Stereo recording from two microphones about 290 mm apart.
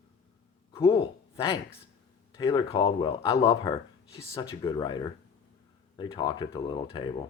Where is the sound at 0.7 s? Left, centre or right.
Centre.